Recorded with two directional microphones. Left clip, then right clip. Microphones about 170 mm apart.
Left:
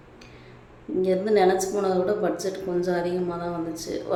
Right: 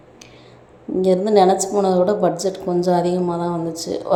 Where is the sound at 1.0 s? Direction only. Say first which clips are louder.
Right 6 dB; 30° right (ahead or behind).